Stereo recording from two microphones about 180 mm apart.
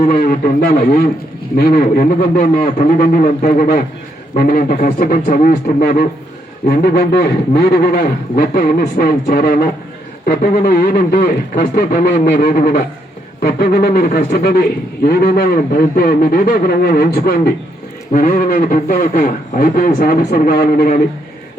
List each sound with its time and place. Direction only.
0.2 s speech: 55° left (ahead or behind)